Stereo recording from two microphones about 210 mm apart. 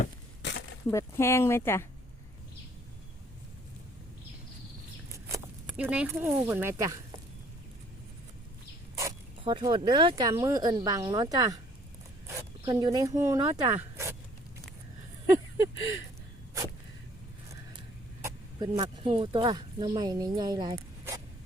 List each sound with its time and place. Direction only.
0.9 s speech: 15° left (ahead or behind)
5.1 s speech: 10° right (ahead or behind)
9.4 s speech: 25° right (ahead or behind)
12.6 s speech: 15° right (ahead or behind)
15.3 s a sound: 15° right (ahead or behind)
18.2 s speech: 15° right (ahead or behind)